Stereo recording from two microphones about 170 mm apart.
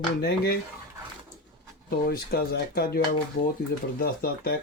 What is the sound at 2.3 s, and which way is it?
Speech, 65° left (ahead or behind).